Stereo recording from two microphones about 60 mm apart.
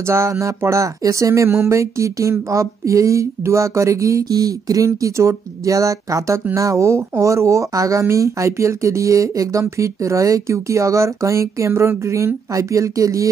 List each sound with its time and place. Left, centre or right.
0.1 s speech: right
4.8 s speech: right
12.5 s speech: right